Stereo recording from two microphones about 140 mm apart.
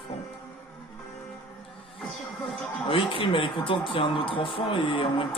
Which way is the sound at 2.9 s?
40° left (ahead or behind).